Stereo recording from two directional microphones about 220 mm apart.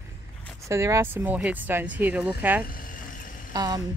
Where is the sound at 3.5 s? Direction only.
20° right (ahead or behind).